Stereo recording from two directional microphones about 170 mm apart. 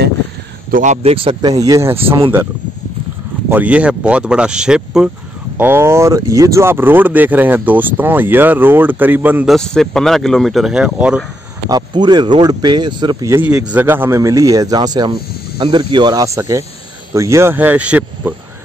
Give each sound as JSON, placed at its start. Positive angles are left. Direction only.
{"t": 0.7, "sound": "speech", "side_deg": -55}
{"t": 1.0, "sound": "a man's voice", "side_deg": -30}
{"t": 3.4, "sound": "speech", "side_deg": -10}
{"t": 9.6, "sound": "speech", "side_deg": 0}
{"t": 11.7, "sound": "a man's voice", "side_deg": -25}
{"t": 13.4, "sound": "a man's voice", "side_deg": -10}